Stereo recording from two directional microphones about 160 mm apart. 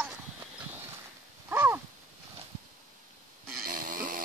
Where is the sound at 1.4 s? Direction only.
10° right (ahead or behind).